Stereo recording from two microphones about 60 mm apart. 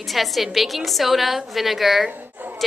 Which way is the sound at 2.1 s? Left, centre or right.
Right.